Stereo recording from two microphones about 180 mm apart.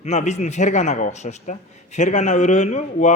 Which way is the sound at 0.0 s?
40° left (ahead or behind).